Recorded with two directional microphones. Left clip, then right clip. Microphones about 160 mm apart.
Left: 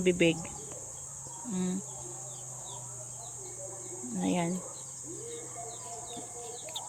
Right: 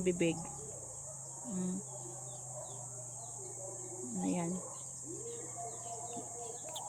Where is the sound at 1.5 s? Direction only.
30° left (ahead or behind).